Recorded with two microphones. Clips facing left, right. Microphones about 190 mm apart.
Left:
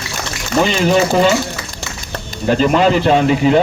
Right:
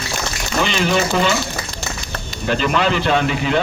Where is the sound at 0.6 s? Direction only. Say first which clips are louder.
Left 6 dB; 35° left (ahead or behind).